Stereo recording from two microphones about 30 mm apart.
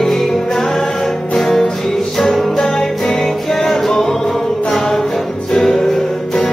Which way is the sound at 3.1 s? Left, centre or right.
Centre.